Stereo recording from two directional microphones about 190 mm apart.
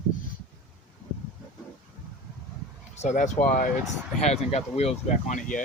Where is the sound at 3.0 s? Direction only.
40° left (ahead or behind).